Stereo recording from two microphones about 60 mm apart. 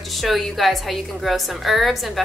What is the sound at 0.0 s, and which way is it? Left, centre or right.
A woman's voice, centre.